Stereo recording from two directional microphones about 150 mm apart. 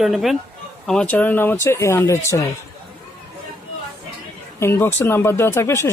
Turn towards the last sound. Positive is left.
turn(degrees=15)  # may be behind; listen again after turning